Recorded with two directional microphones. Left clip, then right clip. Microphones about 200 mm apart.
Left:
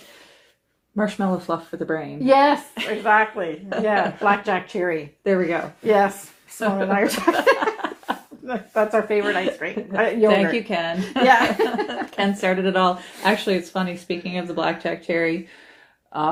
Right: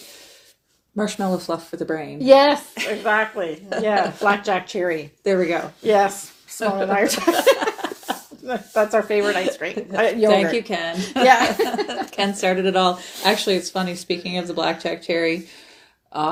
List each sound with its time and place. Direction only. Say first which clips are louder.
0.9 s speech: even; 30° right (ahead or behind)
10.2 s speech: even; 25° right (ahead or behind)
11.2 s speech: right 1 dB; 40° right (ahead or behind)